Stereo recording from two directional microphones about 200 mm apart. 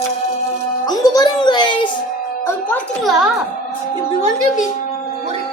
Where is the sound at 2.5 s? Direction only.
10° left (ahead or behind).